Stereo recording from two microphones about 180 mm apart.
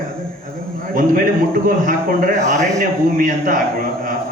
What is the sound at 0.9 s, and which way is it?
A man's voice, 50° right (ahead or behind).